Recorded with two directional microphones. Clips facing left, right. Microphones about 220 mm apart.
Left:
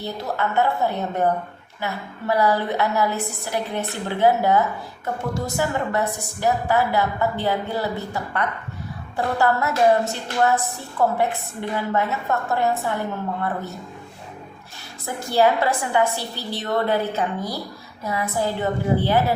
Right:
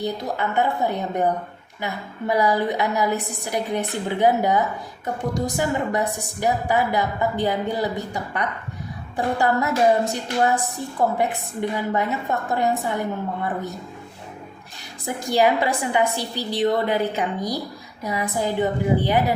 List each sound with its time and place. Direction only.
0.0 s a woman's voice: 15° right (ahead or behind)
15.0 s a woman's voice: 15° right (ahead or behind)